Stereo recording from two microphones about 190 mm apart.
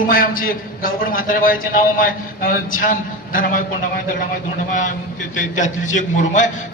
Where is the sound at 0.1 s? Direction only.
45° left (ahead or behind).